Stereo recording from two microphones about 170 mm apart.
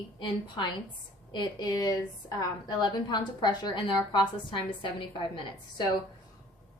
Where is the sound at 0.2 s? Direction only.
25° left (ahead or behind).